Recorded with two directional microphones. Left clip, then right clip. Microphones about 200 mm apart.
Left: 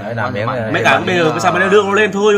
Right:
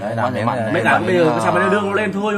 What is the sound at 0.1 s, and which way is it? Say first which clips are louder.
Speech: left 3 dB; 5° right (ahead or behind).